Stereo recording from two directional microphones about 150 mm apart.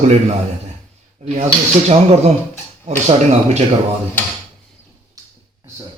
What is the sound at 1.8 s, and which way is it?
Speech, 45° right (ahead or behind).